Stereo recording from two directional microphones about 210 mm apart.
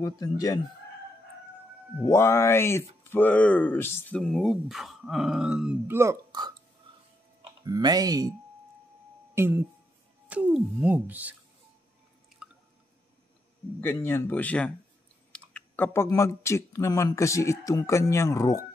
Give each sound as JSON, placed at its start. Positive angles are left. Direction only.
{"t": 0.0, "sound": "speech", "side_deg": 15}
{"t": 2.0, "sound": "speech", "side_deg": 10}
{"t": 7.6, "sound": "speech", "side_deg": -15}
{"t": 9.3, "sound": "speech", "side_deg": -10}
{"t": 12.4, "sound": "drip", "side_deg": -5}
{"t": 13.7, "sound": "speech", "side_deg": 10}